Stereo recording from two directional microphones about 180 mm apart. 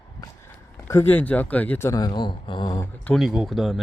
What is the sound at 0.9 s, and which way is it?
Speech, 15° left (ahead or behind).